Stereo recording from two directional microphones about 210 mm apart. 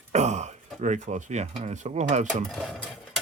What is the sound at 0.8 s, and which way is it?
Speech, 35° right (ahead or behind).